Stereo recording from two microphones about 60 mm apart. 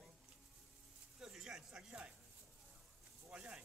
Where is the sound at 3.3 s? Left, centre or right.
Right.